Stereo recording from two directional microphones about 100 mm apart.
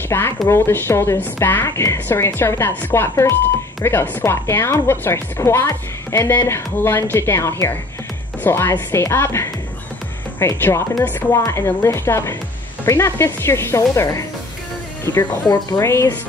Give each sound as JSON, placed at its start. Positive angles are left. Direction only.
{"t": 0.1, "sound": "speech", "side_deg": 25}
{"t": 15.8, "sound": "speech", "side_deg": 25}